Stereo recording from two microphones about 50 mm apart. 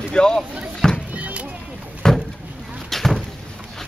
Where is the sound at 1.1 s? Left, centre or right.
Right.